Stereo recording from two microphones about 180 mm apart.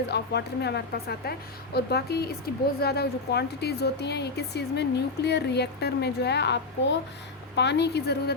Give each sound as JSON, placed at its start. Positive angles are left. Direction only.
{"t": 0.1, "sound": "a woman's voice", "side_deg": 70}